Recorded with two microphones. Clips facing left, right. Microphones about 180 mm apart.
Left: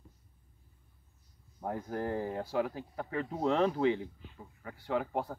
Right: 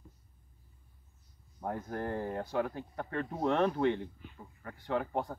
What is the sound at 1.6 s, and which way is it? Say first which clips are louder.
Speech: left 1 dB; 10° left (ahead or behind).